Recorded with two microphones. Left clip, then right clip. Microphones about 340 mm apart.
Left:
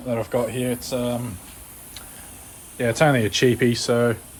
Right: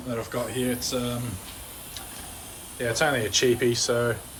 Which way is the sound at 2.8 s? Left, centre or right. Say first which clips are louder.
Left 5 dB; centre.